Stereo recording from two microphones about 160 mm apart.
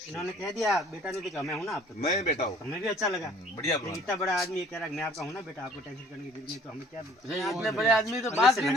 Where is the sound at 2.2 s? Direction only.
45° left (ahead or behind).